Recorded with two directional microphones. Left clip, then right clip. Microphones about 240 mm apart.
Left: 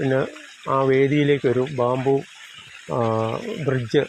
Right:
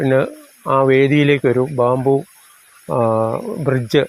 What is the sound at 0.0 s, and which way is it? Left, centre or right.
Speech, right.